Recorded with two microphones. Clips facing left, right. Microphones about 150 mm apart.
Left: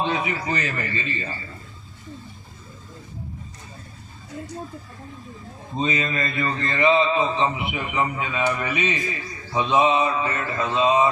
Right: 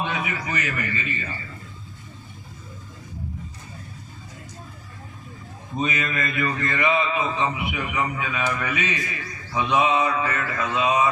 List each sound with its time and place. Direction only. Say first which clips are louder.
0.0 s mantra: left 3 dB; 30° left (ahead or behind)
5.7 s mantra: left 2 dB; 25° left (ahead or behind)